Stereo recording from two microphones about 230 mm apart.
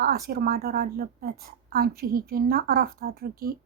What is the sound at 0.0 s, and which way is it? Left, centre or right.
Speech, right.